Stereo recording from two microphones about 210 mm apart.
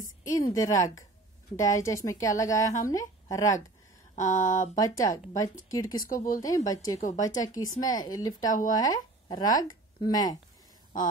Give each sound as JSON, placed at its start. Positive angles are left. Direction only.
{"t": 0.2, "sound": "a woman's voice", "side_deg": 15}
{"t": 4.1, "sound": "a sound", "side_deg": 35}
{"t": 4.7, "sound": "a woman's voice", "side_deg": 15}
{"t": 6.0, "sound": "speech", "side_deg": 40}
{"t": 6.4, "sound": "a woman's voice", "side_deg": 15}